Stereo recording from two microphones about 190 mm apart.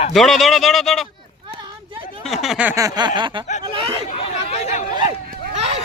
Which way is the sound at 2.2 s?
Centre (ahead or behind).